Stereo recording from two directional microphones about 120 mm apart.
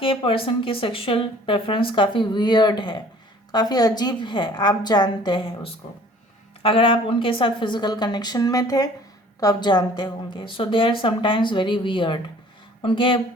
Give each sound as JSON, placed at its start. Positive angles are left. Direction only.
{"t": 0.0, "sound": "a woman's voice", "side_deg": 50}